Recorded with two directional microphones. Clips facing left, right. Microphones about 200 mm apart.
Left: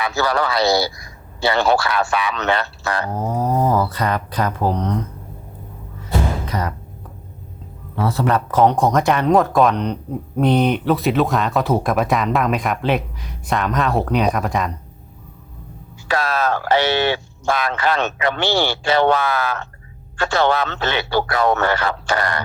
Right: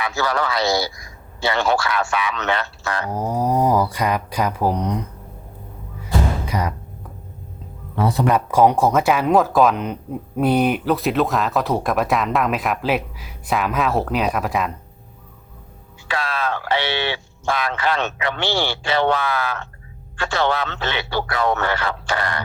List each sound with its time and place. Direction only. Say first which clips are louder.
0.0 s speech: left 2 dB; 35° left (ahead or behind)
3.1 s speech: right 2 dB; 10° right (ahead or behind)
6.4 s music: even; 10° right (ahead or behind)
8.0 s speech: even; 15° right (ahead or behind)
16.0 s speech: left 4 dB; 40° left (ahead or behind)